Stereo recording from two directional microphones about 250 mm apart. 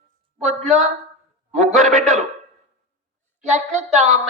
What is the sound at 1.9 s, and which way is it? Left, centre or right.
Speech, right.